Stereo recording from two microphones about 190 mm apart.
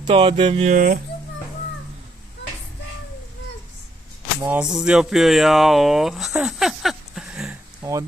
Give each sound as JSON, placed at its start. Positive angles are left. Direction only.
{"t": 0.0, "sound": "speech", "side_deg": -30}
{"t": 4.4, "sound": "speech", "side_deg": -5}
{"t": 7.8, "sound": "a sound", "side_deg": -15}